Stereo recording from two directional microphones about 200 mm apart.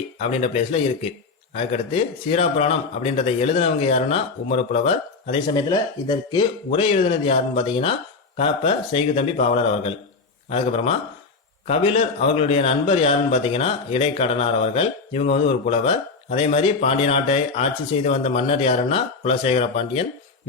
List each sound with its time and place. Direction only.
0.2 s a man's voice: 35° left (ahead or behind)